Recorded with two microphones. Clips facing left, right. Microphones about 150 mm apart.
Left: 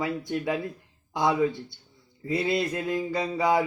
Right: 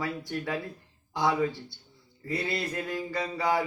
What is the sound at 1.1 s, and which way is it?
Speech, 20° left (ahead or behind).